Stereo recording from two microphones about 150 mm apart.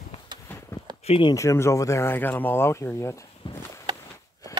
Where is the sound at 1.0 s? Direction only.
40° left (ahead or behind).